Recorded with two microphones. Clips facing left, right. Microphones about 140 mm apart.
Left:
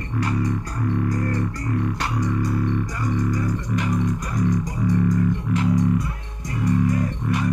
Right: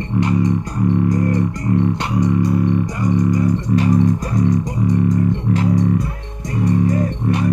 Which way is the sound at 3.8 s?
30° right (ahead or behind).